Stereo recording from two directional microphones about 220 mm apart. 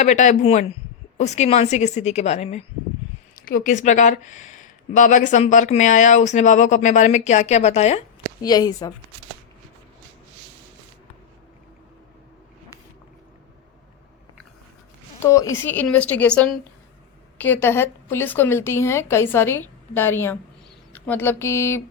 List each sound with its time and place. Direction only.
0.0 s speech: 35° left (ahead or behind)
3.3 s speech: 40° left (ahead or behind)
8.4 s a woman's voice: 15° left (ahead or behind)
15.2 s a woman's voice: 15° left (ahead or behind)